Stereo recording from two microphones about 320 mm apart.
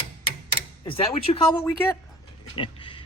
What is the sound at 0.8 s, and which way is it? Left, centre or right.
Speech, centre.